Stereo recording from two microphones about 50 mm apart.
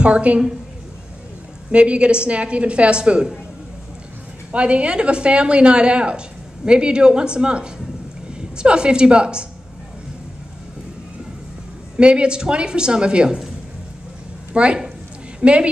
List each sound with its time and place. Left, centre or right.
0.0 s a woman's voice: right
1.7 s a woman's voice: right
4.5 s a woman's voice: right
12.0 s a woman's voice: centre
14.5 s a woman's voice: right